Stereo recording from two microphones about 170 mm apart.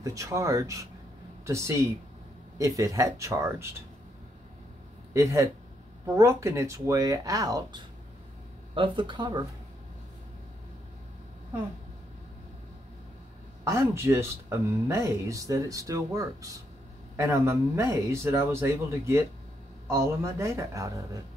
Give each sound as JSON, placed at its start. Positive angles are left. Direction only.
{"t": 0.0, "sound": "speech", "side_deg": -20}
{"t": 5.1, "sound": "speech", "side_deg": -20}
{"t": 13.7, "sound": "speech", "side_deg": -15}